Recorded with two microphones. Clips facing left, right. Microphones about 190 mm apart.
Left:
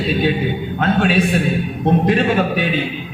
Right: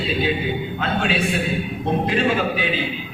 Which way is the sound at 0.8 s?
50° left (ahead or behind).